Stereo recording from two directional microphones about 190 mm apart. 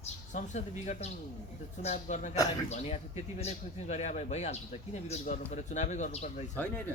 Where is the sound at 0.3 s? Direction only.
40° left (ahead or behind).